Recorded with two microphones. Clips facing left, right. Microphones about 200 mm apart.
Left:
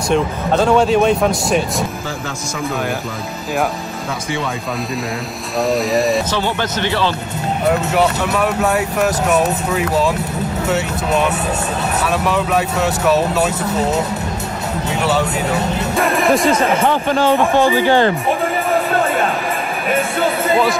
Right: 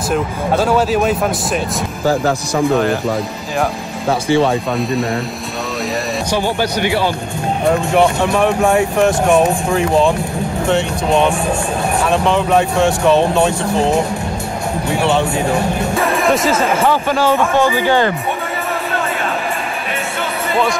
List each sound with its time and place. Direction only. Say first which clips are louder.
0.1 s speech: left 1 dB; 5° right (ahead or behind)
5.7 s speech: left 6 dB; centre (ahead or behind)
6.6 s speech: right 3 dB; 10° right (ahead or behind)
8.7 s speech: right 4 dB; 5° left (ahead or behind)
10.7 s speech: right 4 dB; 5° left (ahead or behind)
12.5 s speech: right 4 dB; 5° left (ahead or behind)
16.0 s speech: left 2 dB; centre (ahead or behind)
16.9 s speech: even; 15° left (ahead or behind)
17.7 s speech: left 1 dB; 15° right (ahead or behind)